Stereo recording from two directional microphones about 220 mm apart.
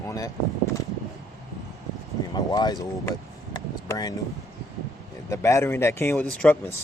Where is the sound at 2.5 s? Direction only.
20° left (ahead or behind).